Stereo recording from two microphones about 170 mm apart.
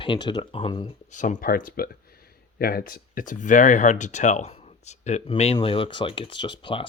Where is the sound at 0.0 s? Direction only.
30° left (ahead or behind).